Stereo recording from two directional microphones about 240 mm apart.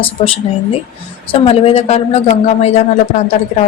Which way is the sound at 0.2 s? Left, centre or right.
Left.